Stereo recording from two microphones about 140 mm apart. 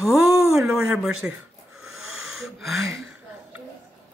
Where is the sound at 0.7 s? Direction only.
5° right (ahead or behind).